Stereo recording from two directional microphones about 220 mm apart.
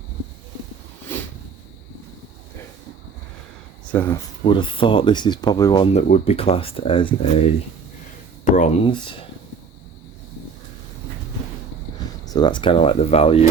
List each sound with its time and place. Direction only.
3.9 s speech: 10° left (ahead or behind)
4.4 s speech: 20° left (ahead or behind)
5.9 s speech: 30° left (ahead or behind)
8.5 s speech: 30° left (ahead or behind)
12.2 s speech: 20° left (ahead or behind)